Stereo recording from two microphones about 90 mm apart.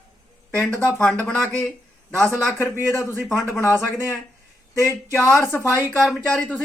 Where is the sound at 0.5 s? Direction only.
10° left (ahead or behind).